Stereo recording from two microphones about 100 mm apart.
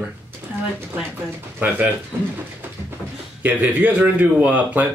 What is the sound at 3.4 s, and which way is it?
Speech, 15° right (ahead or behind).